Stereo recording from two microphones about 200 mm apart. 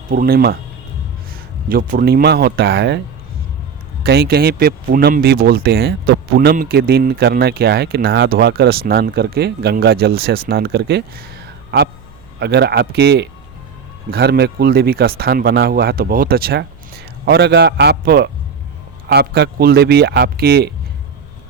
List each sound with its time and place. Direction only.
0.1 s speech: 50° right (ahead or behind)
1.7 s speech: 45° right (ahead or behind)
4.0 s speech: 50° right (ahead or behind)
12.4 s a man's voice: 55° right (ahead or behind)